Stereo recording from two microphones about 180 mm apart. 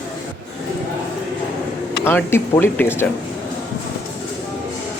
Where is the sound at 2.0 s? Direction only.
10° left (ahead or behind).